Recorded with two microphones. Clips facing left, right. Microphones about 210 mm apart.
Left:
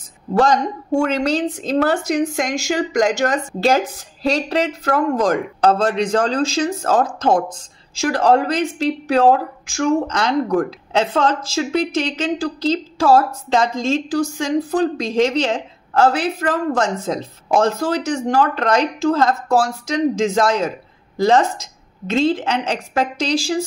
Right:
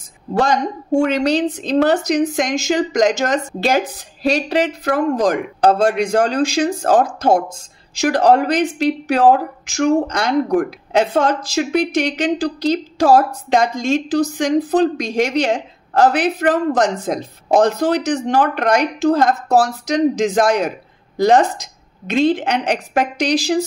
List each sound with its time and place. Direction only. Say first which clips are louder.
0.3 s a woman's voice: left 1 dB; 15° right (ahead or behind)